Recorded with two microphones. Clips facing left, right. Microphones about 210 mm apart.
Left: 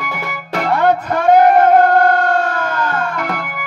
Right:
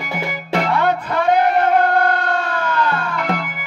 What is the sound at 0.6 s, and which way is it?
Music, 45° left (ahead or behind).